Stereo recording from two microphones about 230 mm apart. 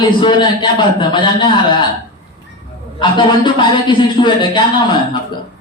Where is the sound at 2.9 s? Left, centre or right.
Left.